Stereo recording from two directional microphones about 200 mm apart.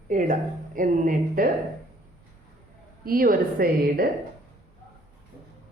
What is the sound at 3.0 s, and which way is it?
A woman's voice, 45° right (ahead or behind).